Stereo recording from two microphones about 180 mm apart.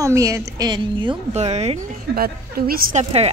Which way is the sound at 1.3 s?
35° right (ahead or behind).